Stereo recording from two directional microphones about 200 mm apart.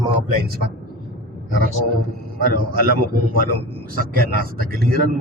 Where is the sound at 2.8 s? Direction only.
45° right (ahead or behind).